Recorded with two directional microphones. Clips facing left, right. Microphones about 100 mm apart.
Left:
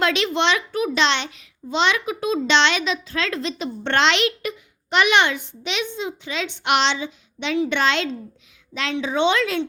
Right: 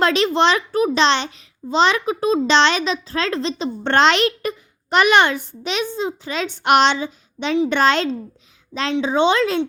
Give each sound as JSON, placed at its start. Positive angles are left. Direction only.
{"t": 0.0, "sound": "a child's voice", "side_deg": -40}